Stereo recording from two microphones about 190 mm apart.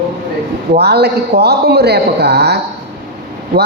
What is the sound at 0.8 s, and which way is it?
A man's voice, 60° right (ahead or behind).